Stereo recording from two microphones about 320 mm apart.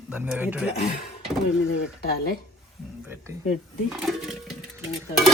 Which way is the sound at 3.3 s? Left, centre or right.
Centre.